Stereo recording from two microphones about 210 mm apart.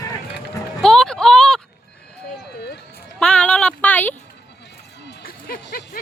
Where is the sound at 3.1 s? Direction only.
5° left (ahead or behind).